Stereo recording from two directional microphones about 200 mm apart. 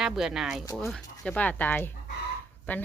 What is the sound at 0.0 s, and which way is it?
Speech, centre (ahead or behind).